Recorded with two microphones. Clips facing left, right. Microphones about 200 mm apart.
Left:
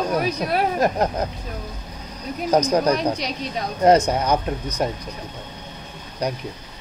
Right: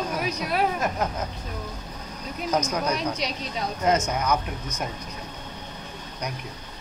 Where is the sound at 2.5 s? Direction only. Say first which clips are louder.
Left 8 dB; 35° left (ahead or behind).